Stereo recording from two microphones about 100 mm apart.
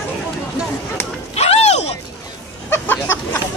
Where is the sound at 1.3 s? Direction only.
90° left.